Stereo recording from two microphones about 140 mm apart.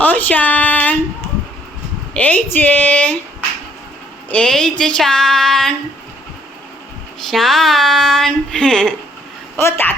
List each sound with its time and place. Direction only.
0.0 s a sound: 10° left (ahead or behind)
2.1 s a woman's voice: 10° left (ahead or behind)
4.3 s speech: 5° left (ahead or behind)
7.3 s speech: centre (ahead or behind)
9.6 s a woman's voice: 15° left (ahead or behind)